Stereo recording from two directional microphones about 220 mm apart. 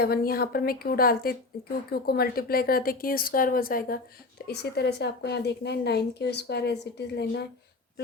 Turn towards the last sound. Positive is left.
turn(degrees=50)  # may be behind; listen again after turning